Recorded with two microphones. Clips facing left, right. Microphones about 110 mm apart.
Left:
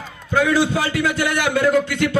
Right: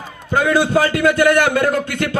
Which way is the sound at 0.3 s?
50° right (ahead or behind).